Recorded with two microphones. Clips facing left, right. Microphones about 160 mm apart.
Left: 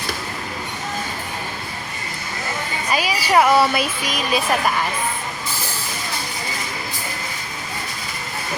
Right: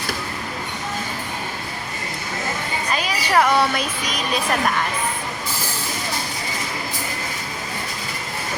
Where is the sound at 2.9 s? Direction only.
10° left (ahead or behind).